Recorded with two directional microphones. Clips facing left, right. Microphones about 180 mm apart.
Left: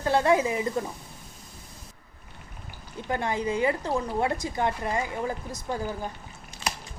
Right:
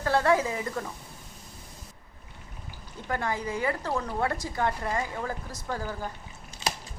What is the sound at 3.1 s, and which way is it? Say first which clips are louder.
Speech: left 3 dB; 20° left (ahead or behind).